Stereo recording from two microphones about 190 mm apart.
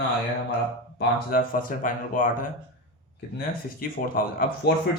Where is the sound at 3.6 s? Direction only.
50° left (ahead or behind).